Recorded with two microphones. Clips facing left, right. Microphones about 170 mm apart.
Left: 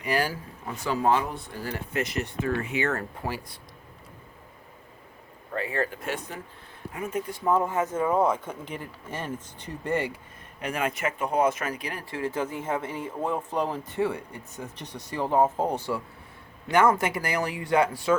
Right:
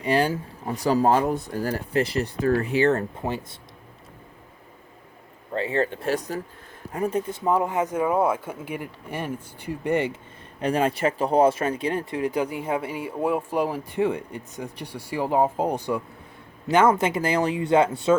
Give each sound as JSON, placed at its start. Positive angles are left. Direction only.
{"t": 0.0, "sound": "speech", "side_deg": -25}
{"t": 0.6, "sound": "speech", "side_deg": -35}
{"t": 5.5, "sound": "speech", "side_deg": -25}
{"t": 10.6, "sound": "speech", "side_deg": -30}